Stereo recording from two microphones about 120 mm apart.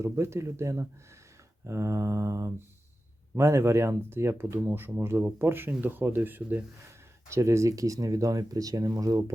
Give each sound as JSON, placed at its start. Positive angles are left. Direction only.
{"t": 0.0, "sound": "speech", "side_deg": -25}